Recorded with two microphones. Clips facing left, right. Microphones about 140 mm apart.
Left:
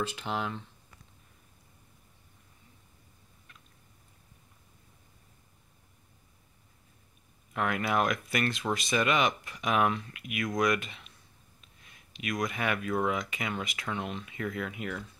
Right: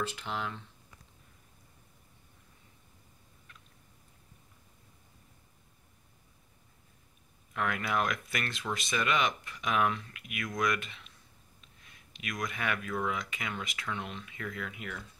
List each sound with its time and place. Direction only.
0.0 s speech: 20° left (ahead or behind)
7.5 s speech: 15° left (ahead or behind)
12.2 s speech: 15° left (ahead or behind)